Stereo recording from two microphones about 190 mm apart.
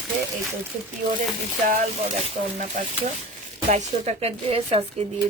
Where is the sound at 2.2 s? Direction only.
40° right (ahead or behind).